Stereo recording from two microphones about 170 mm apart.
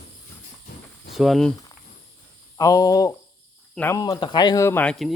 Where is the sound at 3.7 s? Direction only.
10° left (ahead or behind).